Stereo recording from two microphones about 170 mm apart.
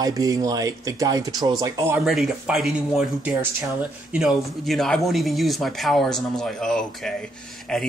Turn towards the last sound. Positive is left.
turn(degrees=5)  # may be behind; listen again after turning